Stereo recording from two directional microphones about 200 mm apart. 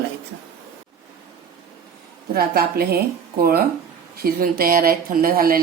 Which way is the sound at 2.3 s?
50° right (ahead or behind).